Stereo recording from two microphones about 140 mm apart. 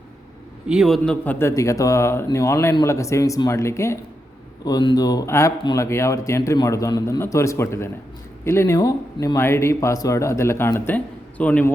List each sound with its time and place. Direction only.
0.7 s speech: centre (ahead or behind); by 3.9 s 20° left (ahead or behind)
4.6 s speech: 30° left (ahead or behind); by 11.7 s 10° left (ahead or behind)